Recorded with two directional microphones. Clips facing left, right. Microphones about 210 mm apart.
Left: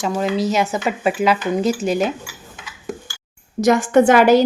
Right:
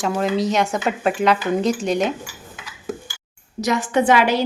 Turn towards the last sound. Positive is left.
turn(degrees=45)  # may be behind; listen again after turning